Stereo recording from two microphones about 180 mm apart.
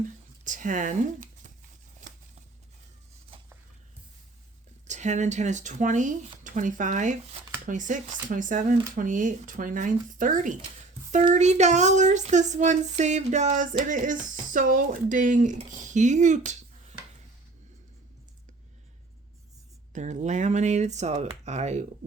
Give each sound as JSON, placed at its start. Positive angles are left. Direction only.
{"t": 0.0, "sound": "speech", "side_deg": -45}
{"t": 4.9, "sound": "speech", "side_deg": -40}
{"t": 19.9, "sound": "speech", "side_deg": -40}